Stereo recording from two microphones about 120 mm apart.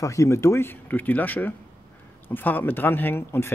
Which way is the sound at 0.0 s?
25° left (ahead or behind).